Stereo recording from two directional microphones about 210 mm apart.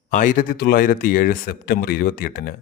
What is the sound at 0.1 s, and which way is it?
A man's voice, 40° left (ahead or behind).